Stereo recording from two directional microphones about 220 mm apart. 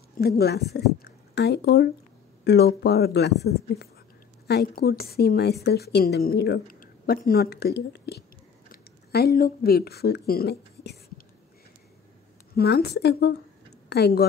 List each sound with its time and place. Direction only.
0.4 s a woman's voice: 45° left (ahead or behind)
12.5 s a woman's voice: 45° left (ahead or behind)